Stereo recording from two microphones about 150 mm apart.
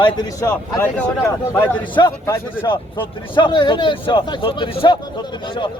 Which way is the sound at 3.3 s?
30° left (ahead or behind).